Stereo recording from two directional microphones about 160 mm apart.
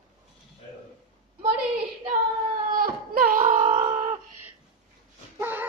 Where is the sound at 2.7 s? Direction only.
60° right (ahead or behind).